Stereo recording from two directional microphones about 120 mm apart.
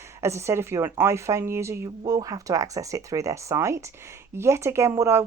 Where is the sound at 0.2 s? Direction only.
20° right (ahead or behind).